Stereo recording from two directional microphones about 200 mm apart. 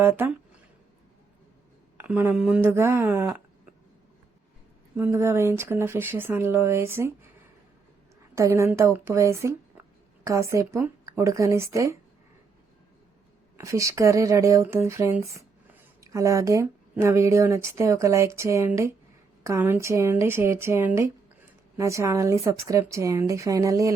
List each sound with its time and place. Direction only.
0.0 s speech: 10° right (ahead or behind)
2.0 s speech: 10° right (ahead or behind)
4.9 s speech: 10° right (ahead or behind)
8.4 s speech: 15° right (ahead or behind)
13.6 s speech: 15° right (ahead or behind)